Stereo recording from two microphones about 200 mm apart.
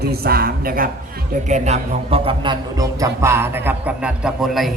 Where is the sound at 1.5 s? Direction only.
35° right (ahead or behind).